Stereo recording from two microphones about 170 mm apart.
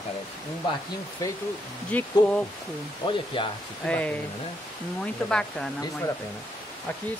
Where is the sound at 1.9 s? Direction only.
10° left (ahead or behind).